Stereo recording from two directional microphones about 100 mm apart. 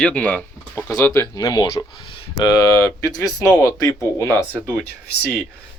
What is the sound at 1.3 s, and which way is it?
Speech, 40° left (ahead or behind).